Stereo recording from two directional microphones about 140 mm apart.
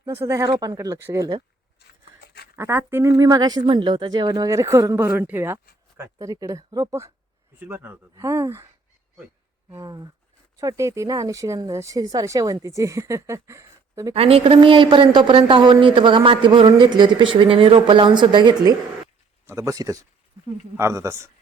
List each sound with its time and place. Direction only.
0.2 s speech: 20° right (ahead or behind)
2.6 s speech: 20° right (ahead or behind)
9.6 s speech: 25° right (ahead or behind)
14.1 s a woman's voice: 45° right (ahead or behind)
19.5 s speech: 20° right (ahead or behind)